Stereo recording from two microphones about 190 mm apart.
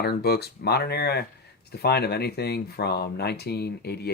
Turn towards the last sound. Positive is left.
turn(degrees=60)  # may be behind; listen again after turning